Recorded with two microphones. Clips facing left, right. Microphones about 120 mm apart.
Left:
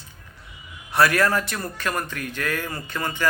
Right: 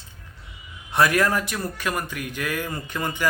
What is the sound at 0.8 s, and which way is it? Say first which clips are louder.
A man's voice: left 1 dB; 20° right (ahead or behind).